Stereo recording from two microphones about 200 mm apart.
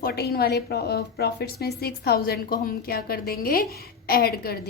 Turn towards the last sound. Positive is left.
turn(degrees=50)  # may be behind; listen again after turning